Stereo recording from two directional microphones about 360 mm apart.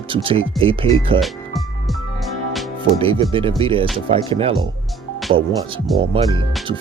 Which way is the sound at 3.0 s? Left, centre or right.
Centre.